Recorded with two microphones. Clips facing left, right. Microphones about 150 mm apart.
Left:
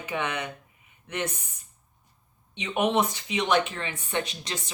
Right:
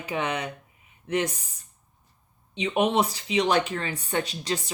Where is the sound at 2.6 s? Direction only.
30° right (ahead or behind).